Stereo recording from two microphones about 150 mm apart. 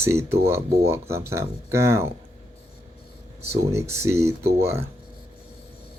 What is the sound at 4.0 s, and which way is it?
Speech, 20° right (ahead or behind).